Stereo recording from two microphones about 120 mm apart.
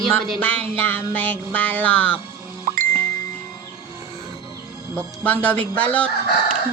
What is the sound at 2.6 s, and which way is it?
Bicycle bell, 90° right.